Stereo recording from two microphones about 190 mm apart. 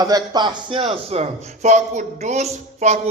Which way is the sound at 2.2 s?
35° right (ahead or behind).